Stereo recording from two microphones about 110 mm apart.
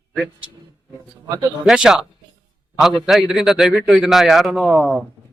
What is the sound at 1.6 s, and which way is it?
A man's voice, 5° right (ahead or behind).